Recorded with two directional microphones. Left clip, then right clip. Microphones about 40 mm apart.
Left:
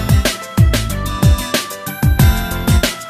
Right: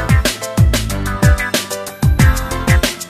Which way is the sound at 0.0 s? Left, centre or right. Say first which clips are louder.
Right 1 dB; left.